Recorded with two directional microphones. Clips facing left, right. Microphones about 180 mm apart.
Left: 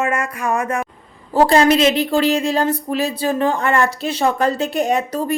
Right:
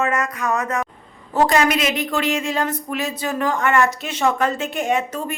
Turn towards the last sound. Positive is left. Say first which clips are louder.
# left 3 dB
turn(degrees=35)  # may be behind; listen again after turning